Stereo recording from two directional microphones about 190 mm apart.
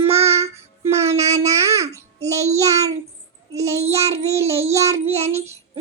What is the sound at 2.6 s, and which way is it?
Child singing, 15° right (ahead or behind).